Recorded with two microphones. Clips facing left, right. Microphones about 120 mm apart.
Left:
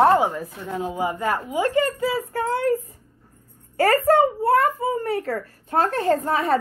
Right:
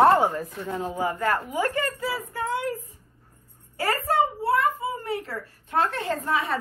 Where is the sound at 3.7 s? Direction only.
45° left (ahead or behind).